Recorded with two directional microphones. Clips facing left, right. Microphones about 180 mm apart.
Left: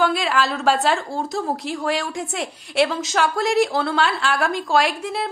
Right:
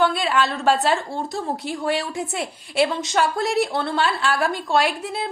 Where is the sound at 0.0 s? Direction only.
Centre (ahead or behind).